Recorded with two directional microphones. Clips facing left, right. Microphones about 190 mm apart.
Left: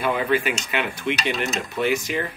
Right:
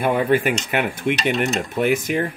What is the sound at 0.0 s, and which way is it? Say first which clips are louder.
Speech: right 4 dB; 50° right (ahead or behind).